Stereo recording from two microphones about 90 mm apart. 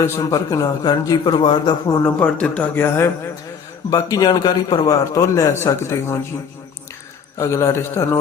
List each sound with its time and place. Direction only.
0.2 s a man's voice: 40° left (ahead or behind)
0.9 s a man's voice: 50° left (ahead or behind)
2.0 s speech: 15° left (ahead or behind)
2.8 s a man's voice: 30° left (ahead or behind)
3.8 s a man's voice: 40° left (ahead or behind)
7.3 s a man's voice: 35° left (ahead or behind)